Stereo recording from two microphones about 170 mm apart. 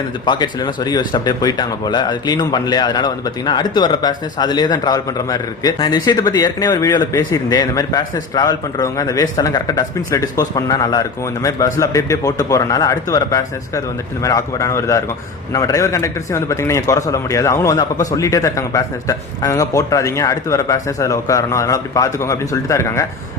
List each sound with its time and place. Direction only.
0.3 s speech: 25° left (ahead or behind)